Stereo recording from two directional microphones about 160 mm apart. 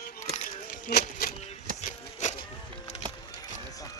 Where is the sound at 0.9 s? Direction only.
75° left (ahead or behind).